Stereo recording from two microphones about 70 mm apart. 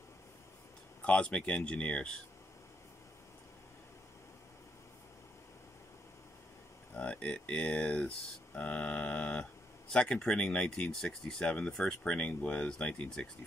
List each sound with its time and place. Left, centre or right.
1.0 s speech: centre
7.0 s speech: centre